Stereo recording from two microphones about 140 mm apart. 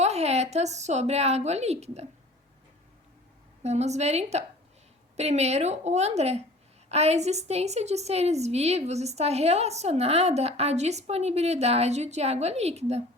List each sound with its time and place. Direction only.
0.0 s a woman's voice: 50° right (ahead or behind)
3.6 s a woman's voice: 50° right (ahead or behind)